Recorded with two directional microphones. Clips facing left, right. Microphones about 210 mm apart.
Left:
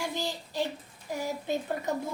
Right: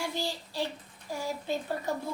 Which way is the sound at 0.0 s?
15° left (ahead or behind).